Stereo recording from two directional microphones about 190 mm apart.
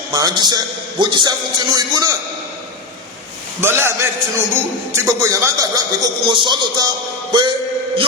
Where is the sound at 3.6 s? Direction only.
10° right (ahead or behind).